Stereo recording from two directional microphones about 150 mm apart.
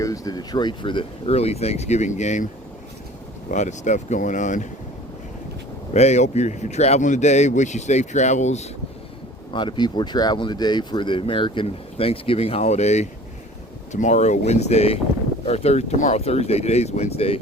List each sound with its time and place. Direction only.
0.0 s speech: 25° left (ahead or behind); by 2.5 s 50° left (ahead or behind)
3.5 s speech: 55° left (ahead or behind)
5.9 s speech: 50° left (ahead or behind)
9.5 s speech: 30° left (ahead or behind)